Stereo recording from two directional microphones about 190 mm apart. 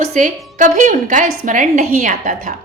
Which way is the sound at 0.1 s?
45° right (ahead or behind).